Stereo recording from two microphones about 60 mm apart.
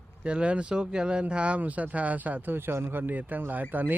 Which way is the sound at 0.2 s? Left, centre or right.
Centre.